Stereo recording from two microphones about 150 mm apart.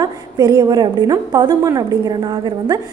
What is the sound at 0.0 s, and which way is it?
A woman's voice, 25° right (ahead or behind).